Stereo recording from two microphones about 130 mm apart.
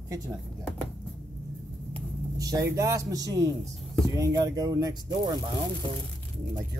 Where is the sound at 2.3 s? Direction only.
25° right (ahead or behind).